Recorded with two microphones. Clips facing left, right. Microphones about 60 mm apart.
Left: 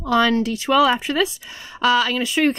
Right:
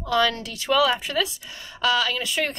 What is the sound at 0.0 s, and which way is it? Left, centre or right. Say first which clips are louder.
Speech: left 5 dB; left.